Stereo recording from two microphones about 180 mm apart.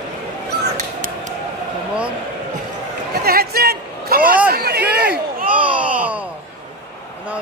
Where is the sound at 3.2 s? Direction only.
60° right (ahead or behind).